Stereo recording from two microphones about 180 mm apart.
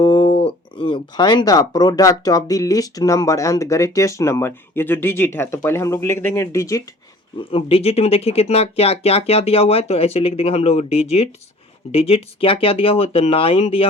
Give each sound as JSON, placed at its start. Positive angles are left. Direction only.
{"t": 0.0, "sound": "speech", "side_deg": 25}
{"t": 7.3, "sound": "speech", "side_deg": 30}